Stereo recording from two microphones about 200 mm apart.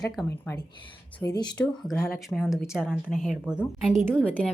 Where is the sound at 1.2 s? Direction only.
15° left (ahead or behind).